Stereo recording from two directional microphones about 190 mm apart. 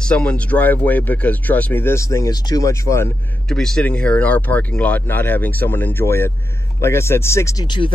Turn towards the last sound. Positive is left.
turn(degrees=25)  # may be behind; listen again after turning